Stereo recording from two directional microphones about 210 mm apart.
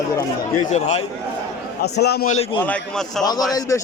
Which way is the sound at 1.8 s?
50° left (ahead or behind).